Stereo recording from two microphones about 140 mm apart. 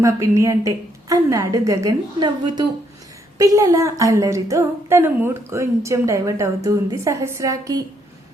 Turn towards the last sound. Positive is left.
turn(degrees=-25)  # may be behind; listen again after turning